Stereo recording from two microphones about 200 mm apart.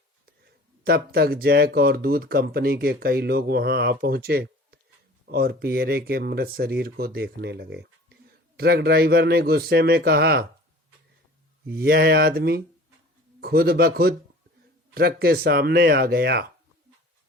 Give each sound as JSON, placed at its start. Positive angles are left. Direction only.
{"t": 0.9, "sound": "speech", "side_deg": -50}
{"t": 11.6, "sound": "speech", "side_deg": -50}